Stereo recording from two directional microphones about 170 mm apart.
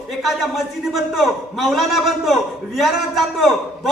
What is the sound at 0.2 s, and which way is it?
A man's voice, centre (ahead or behind).